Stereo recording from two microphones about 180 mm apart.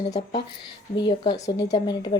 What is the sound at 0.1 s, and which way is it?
A woman's voice, 25° left (ahead or behind).